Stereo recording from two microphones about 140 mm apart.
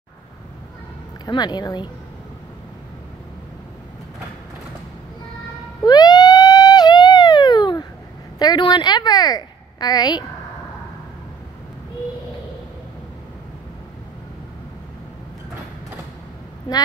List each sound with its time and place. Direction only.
1.2 s speech: 30° left (ahead or behind)
5.9 s a sound: 30° left (ahead or behind)
8.4 s a woman's voice: 30° left (ahead or behind)